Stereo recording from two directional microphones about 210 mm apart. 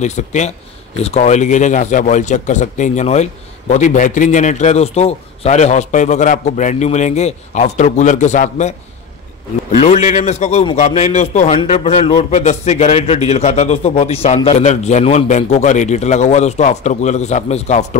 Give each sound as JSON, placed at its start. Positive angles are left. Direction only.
{"t": 0.0, "sound": "a man's voice", "side_deg": 35}
{"t": 9.8, "sound": "a man's voice", "side_deg": 35}